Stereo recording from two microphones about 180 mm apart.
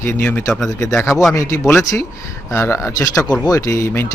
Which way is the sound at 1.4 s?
15° left (ahead or behind).